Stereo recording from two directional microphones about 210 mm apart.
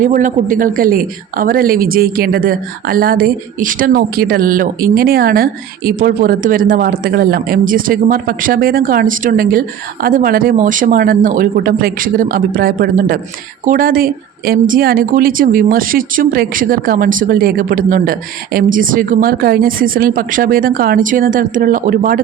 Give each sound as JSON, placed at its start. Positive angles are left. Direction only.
{"t": 0.0, "sound": "a woman's voice", "side_deg": -40}